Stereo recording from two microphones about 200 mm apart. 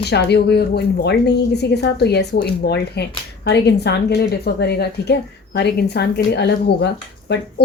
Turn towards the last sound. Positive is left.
turn(degrees=55)  # may be behind; listen again after turning